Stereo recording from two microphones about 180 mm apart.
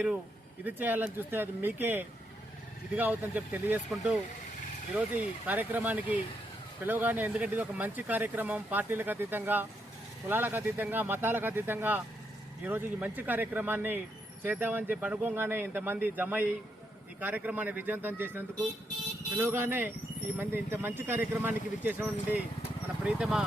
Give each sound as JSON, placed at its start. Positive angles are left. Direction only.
{"t": 0.6, "sound": "speech", "side_deg": -10}
{"t": 4.9, "sound": "speech", "side_deg": -10}